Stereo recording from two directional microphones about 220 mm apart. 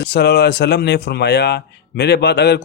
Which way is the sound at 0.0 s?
50° left (ahead or behind).